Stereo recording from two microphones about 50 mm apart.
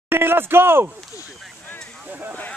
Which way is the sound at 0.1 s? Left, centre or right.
Right.